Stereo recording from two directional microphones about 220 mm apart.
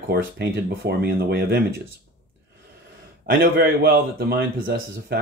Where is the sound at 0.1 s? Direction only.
45° right (ahead or behind).